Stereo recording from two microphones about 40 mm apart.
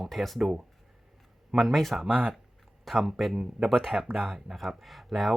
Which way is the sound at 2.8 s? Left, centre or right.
Centre.